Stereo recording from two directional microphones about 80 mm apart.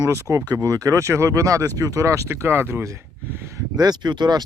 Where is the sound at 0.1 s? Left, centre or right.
Right.